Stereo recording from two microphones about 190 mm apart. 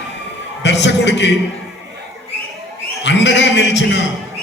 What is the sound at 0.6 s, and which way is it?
Speech, 65° left (ahead or behind).